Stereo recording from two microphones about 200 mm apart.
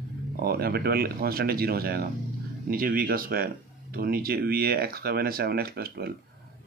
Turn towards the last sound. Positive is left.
turn(degrees=-50)  # may be behind; listen again after turning